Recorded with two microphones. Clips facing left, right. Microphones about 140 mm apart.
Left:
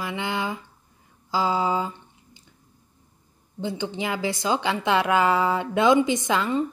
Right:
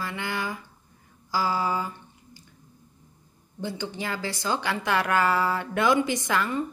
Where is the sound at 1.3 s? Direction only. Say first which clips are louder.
Left 3 dB; 20° left (ahead or behind).